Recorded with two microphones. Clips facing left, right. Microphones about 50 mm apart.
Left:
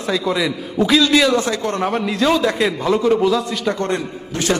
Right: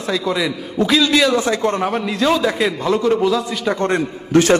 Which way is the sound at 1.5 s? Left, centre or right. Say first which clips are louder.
Right 3 dB; right.